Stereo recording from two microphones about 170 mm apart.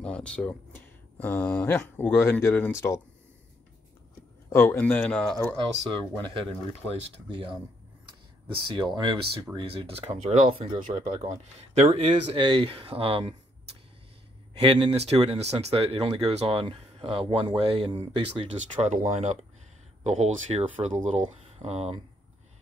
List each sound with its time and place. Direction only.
0.0 s speech: 5° left (ahead or behind)
4.5 s speech: 15° left (ahead or behind)
6.9 s speech: 35° right (ahead or behind)
10.9 s speech: 45° right (ahead or behind)
14.6 s speech: 30° right (ahead or behind)